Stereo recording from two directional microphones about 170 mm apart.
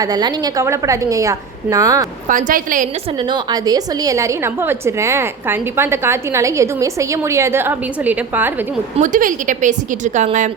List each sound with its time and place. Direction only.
0.0 s a woman's voice: 20° right (ahead or behind)
2.3 s a woman's voice: 50° right (ahead or behind)
3.5 s a woman's voice: 20° right (ahead or behind)
9.0 s a woman's voice: 50° right (ahead or behind)